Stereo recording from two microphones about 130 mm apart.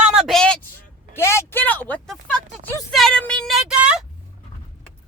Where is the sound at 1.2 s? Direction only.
20° left (ahead or behind); by 4.1 s 5° right (ahead or behind).